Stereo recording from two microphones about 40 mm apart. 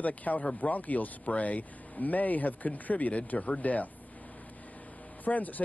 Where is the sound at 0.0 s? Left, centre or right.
Left.